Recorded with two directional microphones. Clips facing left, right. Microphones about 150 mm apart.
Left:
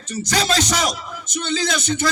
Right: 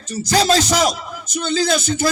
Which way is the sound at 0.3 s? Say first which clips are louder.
Right 5 dB; 30° right (ahead or behind).